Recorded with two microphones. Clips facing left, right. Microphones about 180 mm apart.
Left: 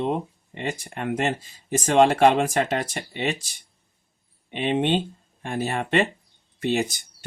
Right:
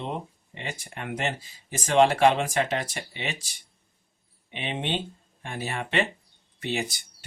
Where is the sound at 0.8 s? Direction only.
45° left (ahead or behind).